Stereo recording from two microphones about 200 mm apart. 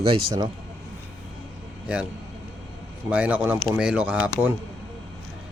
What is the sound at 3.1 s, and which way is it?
Speech, 5° right (ahead or behind).